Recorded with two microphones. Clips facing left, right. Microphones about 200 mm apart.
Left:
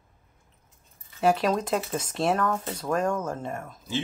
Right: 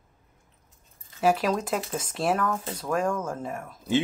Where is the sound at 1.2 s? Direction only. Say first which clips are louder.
Left 1 dB; 5° right (ahead or behind).